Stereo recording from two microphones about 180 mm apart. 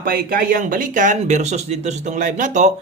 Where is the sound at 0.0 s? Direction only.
55° right (ahead or behind).